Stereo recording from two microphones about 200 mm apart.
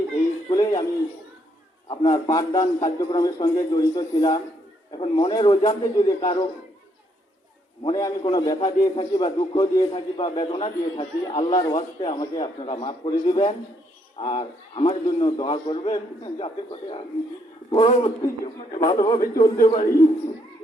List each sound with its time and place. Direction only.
0.5 s a sound: 20° left (ahead or behind)
1.9 s a man's voice: 25° left (ahead or behind)
7.9 s a man's voice: 20° left (ahead or behind)
17.7 s a man's voice: 25° left (ahead or behind)
19.4 s a man's voice: 40° left (ahead or behind)